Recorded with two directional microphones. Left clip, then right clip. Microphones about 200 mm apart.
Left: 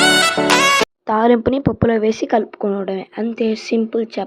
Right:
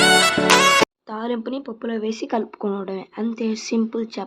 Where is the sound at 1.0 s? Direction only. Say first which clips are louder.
Left 13 dB; 35° left (ahead or behind).